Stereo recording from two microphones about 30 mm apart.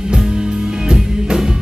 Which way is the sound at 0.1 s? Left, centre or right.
Right.